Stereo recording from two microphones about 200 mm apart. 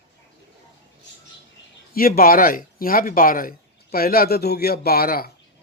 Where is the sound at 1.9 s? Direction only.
45° left (ahead or behind).